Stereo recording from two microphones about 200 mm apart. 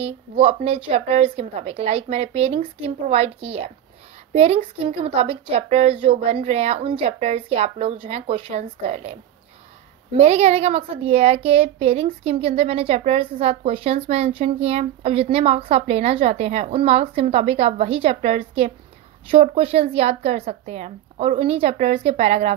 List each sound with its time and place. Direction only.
0.0 s a woman's voice: 30° right (ahead or behind)